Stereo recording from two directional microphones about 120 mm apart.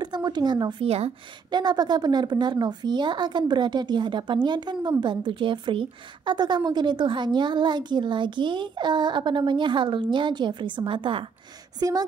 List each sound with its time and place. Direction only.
0.0 s speech: 35° right (ahead or behind)
0.8 s speech: 60° right (ahead or behind)
1.5 s a woman's voice: 35° right (ahead or behind)
11.8 s speech: 30° right (ahead or behind)